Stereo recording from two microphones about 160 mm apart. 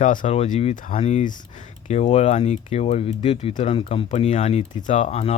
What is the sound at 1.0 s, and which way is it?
Speech, 45° left (ahead or behind).